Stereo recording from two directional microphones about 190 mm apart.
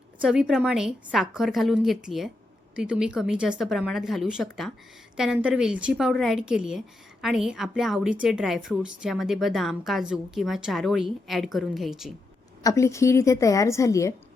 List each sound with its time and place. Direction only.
0.2 s a woman's voice: 5° right (ahead or behind)
12.6 s a woman's voice: 15° left (ahead or behind)